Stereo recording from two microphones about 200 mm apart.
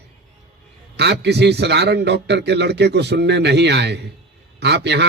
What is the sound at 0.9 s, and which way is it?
A man's voice, 60° right (ahead or behind).